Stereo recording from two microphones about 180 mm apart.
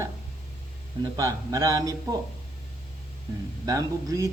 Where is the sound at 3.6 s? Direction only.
20° right (ahead or behind).